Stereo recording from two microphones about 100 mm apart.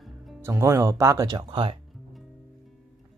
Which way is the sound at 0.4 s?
30° right (ahead or behind).